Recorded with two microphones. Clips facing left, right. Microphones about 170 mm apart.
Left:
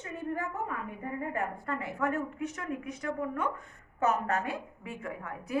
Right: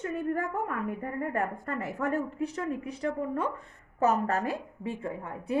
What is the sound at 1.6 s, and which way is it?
A woman's voice, 40° right (ahead or behind).